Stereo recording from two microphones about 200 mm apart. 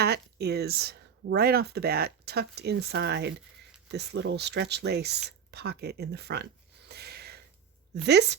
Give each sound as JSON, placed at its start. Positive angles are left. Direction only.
{"t": 0.0, "sound": "speech", "side_deg": -55}